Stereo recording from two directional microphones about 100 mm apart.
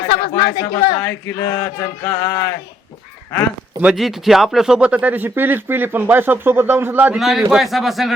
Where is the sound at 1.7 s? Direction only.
35° left (ahead or behind).